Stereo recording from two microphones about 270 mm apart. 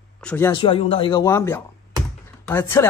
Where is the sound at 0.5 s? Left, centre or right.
Centre.